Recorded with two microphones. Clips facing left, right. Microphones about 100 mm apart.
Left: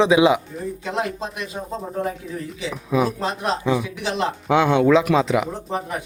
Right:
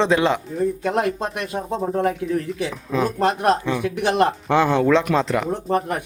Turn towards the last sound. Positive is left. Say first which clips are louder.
# right 5 dB
turn(degrees=-60)  # may be behind; listen again after turning